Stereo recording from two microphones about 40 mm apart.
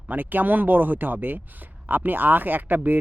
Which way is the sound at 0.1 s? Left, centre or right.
Right.